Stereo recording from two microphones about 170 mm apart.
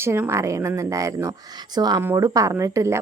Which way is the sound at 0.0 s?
15° right (ahead or behind).